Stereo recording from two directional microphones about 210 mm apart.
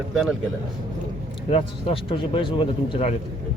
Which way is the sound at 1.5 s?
25° left (ahead or behind).